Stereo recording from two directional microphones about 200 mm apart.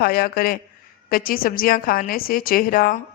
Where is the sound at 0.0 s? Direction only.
50° left (ahead or behind).